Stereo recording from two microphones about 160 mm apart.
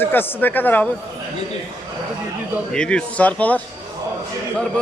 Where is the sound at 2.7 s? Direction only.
5° left (ahead or behind).